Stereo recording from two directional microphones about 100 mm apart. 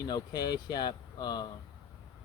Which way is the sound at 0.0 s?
45° left (ahead or behind).